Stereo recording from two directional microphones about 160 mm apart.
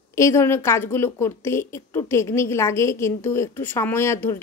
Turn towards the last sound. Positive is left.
turn(degrees=15)  # may be behind; listen again after turning